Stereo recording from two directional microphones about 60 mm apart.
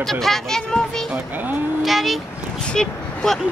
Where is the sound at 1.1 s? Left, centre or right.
Right.